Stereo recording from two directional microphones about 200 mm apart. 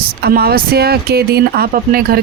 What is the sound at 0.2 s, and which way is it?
Speech, 50° right (ahead or behind).